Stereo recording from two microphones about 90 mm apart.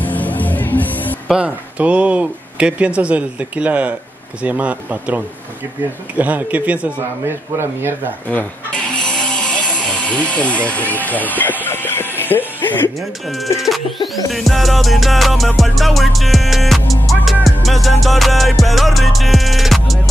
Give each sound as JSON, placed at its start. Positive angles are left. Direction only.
{"t": 0.0, "sound": "music", "side_deg": 20}
{"t": 1.3, "sound": "speech", "side_deg": -15}
{"t": 7.2, "sound": "speech", "side_deg": -25}
{"t": 8.3, "sound": "music", "side_deg": 15}
{"t": 14.0, "sound": "music", "side_deg": 0}